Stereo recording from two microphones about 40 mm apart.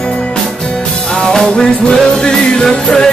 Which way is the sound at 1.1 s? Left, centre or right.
Centre.